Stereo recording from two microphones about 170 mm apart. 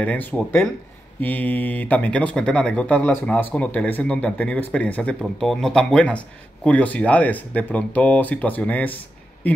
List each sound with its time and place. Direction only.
0.0 s speech: 10° left (ahead or behind)